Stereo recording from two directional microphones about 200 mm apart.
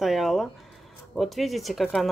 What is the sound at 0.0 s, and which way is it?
Speech, centre (ahead or behind).